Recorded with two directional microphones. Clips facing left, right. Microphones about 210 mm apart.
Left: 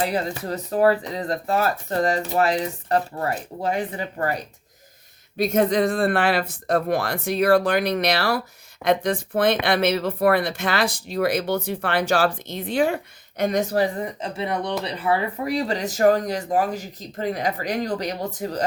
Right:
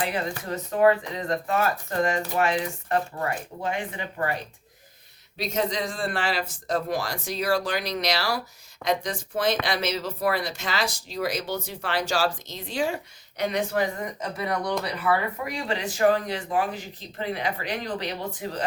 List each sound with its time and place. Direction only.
0.0 s speech: 40° left (ahead or behind)
5.4 s speech: 55° left (ahead or behind)